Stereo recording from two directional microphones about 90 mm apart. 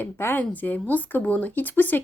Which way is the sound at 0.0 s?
25° left (ahead or behind).